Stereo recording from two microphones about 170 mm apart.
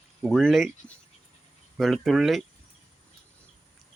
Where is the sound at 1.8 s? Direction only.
Centre (ahead or behind).